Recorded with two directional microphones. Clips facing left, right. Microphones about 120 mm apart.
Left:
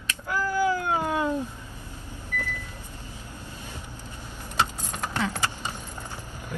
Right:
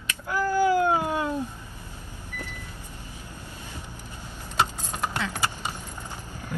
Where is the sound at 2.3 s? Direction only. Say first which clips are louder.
Left 6 dB; 15° right (ahead or behind).